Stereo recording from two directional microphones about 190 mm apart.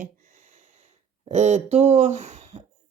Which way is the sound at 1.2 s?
35° right (ahead or behind).